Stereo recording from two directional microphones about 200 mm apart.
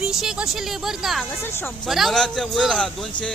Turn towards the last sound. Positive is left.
turn(degrees=5)  # may be behind; listen again after turning